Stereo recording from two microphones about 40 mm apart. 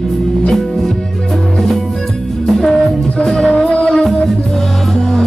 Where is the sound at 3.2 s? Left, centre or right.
Centre.